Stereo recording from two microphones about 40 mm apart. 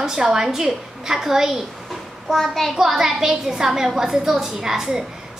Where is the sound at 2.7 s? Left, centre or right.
Centre.